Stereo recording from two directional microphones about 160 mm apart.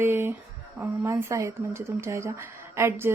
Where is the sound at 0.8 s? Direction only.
15° right (ahead or behind).